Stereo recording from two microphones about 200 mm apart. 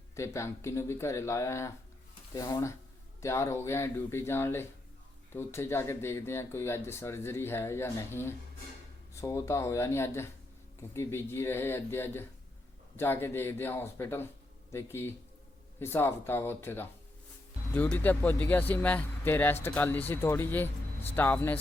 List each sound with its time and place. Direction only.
0.2 s speech: 15° left (ahead or behind)